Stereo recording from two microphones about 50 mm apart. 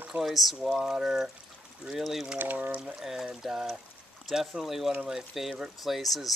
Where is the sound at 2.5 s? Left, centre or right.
Right.